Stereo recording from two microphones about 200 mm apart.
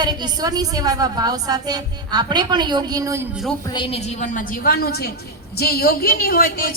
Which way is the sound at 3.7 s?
30° left (ahead or behind).